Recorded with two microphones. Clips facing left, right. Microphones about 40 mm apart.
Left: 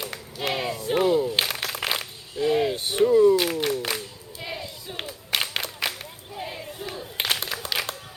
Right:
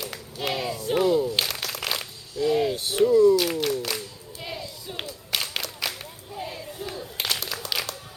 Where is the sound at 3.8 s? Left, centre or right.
Left.